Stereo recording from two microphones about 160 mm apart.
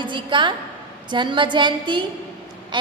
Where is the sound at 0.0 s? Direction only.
30° right (ahead or behind).